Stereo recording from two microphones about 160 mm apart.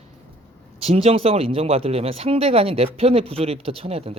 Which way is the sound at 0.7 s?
40° right (ahead or behind).